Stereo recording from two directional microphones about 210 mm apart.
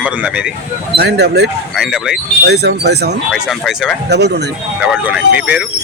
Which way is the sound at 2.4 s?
50° right (ahead or behind).